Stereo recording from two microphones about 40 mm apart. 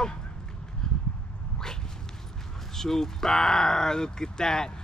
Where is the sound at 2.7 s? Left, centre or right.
Centre.